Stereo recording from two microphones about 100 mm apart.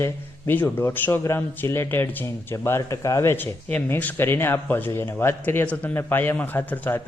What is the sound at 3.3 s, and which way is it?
A man's voice, 15° left (ahead or behind).